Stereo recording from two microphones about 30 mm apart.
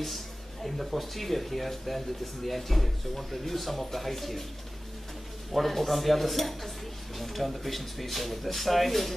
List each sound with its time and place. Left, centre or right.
0.0 s speech: centre
5.5 s speech: centre